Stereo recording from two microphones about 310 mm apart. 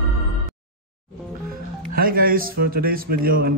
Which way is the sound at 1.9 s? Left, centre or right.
Right.